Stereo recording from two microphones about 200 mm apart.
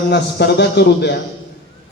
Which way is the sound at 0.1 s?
55° left (ahead or behind).